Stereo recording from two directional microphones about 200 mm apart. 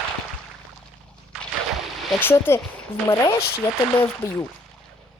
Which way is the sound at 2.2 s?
10° left (ahead or behind).